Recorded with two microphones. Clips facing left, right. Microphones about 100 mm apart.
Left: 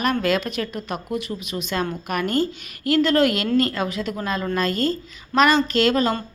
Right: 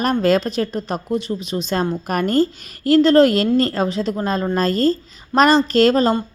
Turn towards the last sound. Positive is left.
turn(degrees=-35)  # may be behind; listen again after turning